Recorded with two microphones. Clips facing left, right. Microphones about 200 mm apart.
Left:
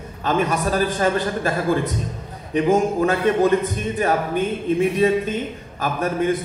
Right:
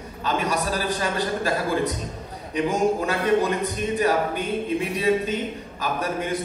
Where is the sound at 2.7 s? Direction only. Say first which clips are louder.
Left 4 dB; 55° left (ahead or behind).